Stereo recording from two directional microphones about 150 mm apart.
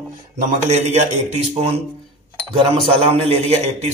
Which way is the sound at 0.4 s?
50° right (ahead or behind).